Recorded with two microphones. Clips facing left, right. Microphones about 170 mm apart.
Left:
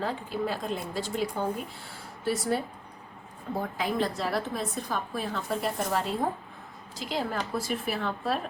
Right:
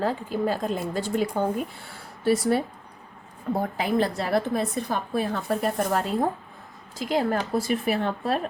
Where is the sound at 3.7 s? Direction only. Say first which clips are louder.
Right 3 dB; 65° right (ahead or behind).